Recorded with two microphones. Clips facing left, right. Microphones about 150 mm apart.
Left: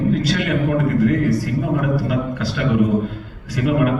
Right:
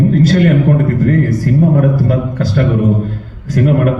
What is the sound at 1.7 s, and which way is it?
A man's voice, 45° right (ahead or behind).